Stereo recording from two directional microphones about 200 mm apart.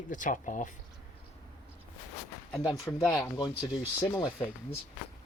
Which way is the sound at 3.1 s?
20° left (ahead or behind).